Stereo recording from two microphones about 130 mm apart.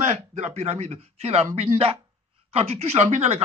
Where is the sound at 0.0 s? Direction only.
65° right (ahead or behind).